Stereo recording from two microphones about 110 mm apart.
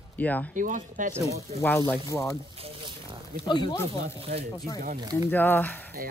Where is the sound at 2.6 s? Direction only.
50° right (ahead or behind).